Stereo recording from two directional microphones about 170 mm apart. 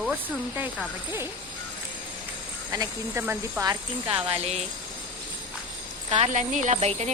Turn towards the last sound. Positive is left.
turn(degrees=-40)  # may be behind; listen again after turning